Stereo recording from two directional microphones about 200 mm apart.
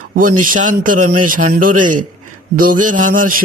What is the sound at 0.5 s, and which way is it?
A man's voice, 40° right (ahead or behind).